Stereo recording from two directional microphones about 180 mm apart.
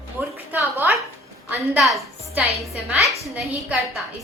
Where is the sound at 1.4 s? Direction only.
5° right (ahead or behind).